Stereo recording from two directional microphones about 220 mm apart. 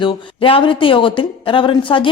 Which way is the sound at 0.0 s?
20° left (ahead or behind).